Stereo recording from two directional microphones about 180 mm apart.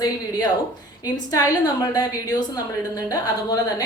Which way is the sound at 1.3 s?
20° left (ahead or behind).